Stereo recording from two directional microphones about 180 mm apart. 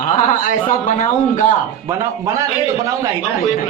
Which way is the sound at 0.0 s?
45° left (ahead or behind).